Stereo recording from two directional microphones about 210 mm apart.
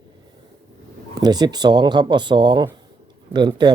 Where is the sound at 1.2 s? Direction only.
20° right (ahead or behind).